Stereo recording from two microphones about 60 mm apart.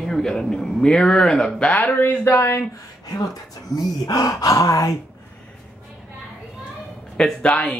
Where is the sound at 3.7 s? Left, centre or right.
Left.